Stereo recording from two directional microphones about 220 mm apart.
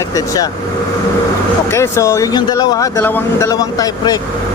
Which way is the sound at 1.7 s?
10° left (ahead or behind).